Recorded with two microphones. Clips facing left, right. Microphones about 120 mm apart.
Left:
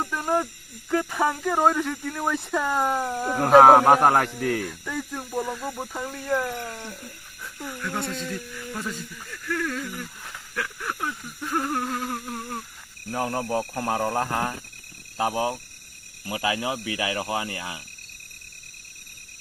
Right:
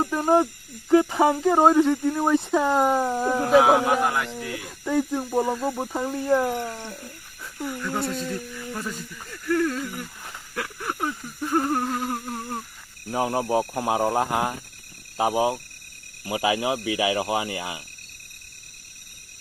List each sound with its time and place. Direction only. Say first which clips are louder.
0.9 s speech: right 6 dB; 20° right (ahead or behind)
3.4 s a man's voice: left 5 dB; 50° left (ahead or behind)
4.6 s speech: right 7 dB; 20° right (ahead or behind)
7.6 s speech: right 3 dB; 5° right (ahead or behind)
10.5 s a sound: right 1 dB; 15° right (ahead or behind)
11.9 s speech: right 2 dB; 10° right (ahead or behind)